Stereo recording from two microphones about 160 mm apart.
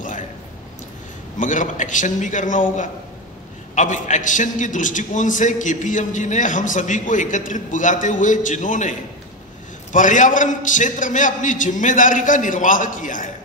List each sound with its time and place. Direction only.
1.4 s a man's voice: 50° left (ahead or behind)
9.9 s a man's voice: 50° left (ahead or behind)